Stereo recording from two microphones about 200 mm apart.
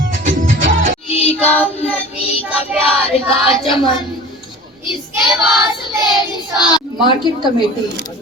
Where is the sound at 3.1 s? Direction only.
25° left (ahead or behind).